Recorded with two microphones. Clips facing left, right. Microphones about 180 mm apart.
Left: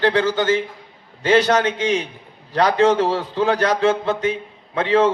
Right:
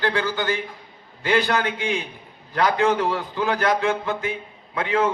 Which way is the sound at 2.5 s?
30° left (ahead or behind).